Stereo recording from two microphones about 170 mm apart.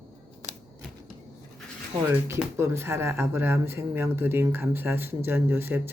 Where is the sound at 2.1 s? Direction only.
15° right (ahead or behind).